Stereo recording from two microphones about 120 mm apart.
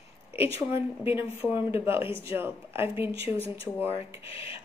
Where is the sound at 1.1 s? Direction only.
20° right (ahead or behind).